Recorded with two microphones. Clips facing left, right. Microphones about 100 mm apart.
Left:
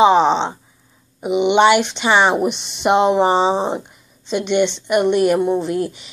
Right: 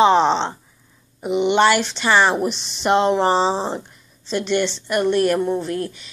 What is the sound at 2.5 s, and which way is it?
Speech, 60° left (ahead or behind).